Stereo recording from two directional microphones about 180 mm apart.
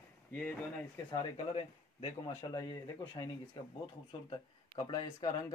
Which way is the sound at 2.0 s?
25° left (ahead or behind).